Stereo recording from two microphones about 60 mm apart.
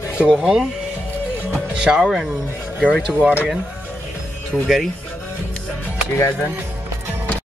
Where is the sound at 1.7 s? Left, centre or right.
Centre.